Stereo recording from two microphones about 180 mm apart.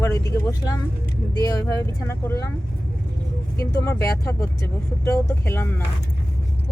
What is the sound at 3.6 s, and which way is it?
Speech, 15° left (ahead or behind).